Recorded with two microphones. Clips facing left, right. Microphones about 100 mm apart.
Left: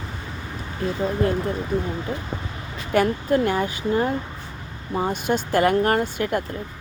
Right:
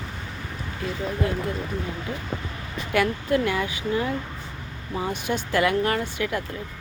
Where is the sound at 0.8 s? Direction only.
35° left (ahead or behind).